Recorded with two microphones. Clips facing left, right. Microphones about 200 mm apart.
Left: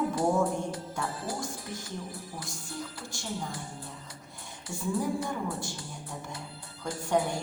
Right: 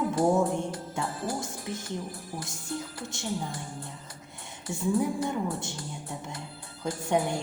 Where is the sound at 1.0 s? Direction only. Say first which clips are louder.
Right 3 dB; 25° right (ahead or behind).